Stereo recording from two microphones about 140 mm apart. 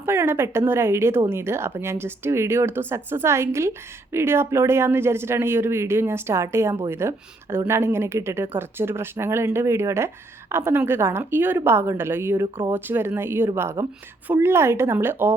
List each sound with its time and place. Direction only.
0.0 s speech: 20° right (ahead or behind)